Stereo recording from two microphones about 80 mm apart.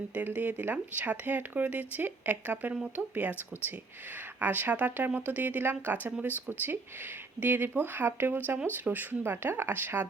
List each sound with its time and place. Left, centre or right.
0.1 s speech: centre
4.4 s speech: right